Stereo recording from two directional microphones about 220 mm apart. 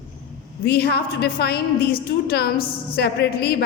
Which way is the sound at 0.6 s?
45° left (ahead or behind).